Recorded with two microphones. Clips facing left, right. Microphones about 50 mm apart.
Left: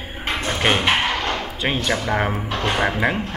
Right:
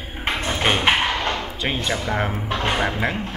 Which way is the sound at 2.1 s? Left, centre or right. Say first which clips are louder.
Left 2 dB; centre.